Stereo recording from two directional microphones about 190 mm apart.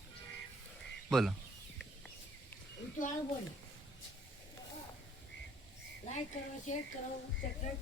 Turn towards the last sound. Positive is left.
turn(degrees=40)  # may be behind; listen again after turning